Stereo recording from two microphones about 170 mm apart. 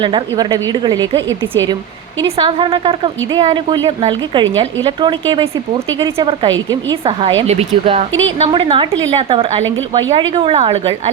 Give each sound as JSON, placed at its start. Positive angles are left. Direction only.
{"t": 0.0, "sound": "a woman's voice", "side_deg": -25}
{"t": 2.2, "sound": "a woman's voice", "side_deg": -30}